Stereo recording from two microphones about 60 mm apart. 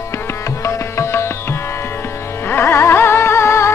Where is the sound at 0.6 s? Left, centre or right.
Left.